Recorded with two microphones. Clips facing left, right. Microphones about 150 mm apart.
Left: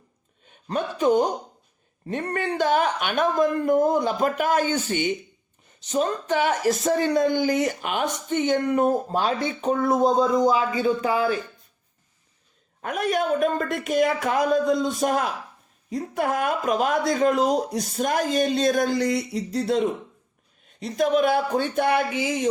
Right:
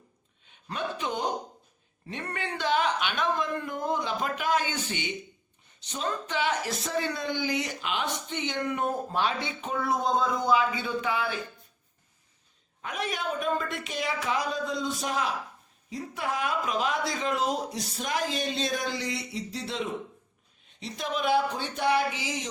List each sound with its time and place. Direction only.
0.4 s speech: 45° left (ahead or behind)
12.8 s speech: 50° left (ahead or behind)